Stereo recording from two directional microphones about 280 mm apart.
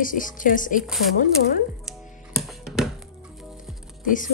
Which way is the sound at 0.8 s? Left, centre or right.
Centre.